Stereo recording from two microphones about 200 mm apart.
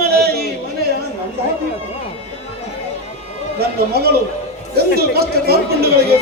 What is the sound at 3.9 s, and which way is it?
A man's voice, 50° right (ahead or behind).